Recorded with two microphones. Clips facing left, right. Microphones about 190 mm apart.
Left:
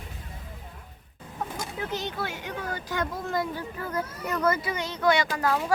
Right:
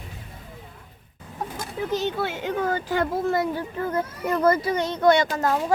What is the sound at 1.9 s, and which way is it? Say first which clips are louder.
Speech: right 10 dB; 20° right (ahead or behind).